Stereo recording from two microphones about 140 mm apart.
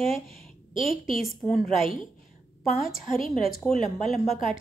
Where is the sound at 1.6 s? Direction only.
45° right (ahead or behind).